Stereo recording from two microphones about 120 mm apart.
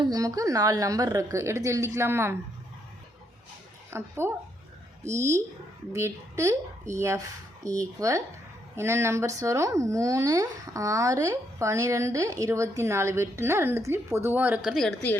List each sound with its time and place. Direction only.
0.0 s speech: 30° right (ahead or behind)
3.9 s speech: 20° right (ahead or behind)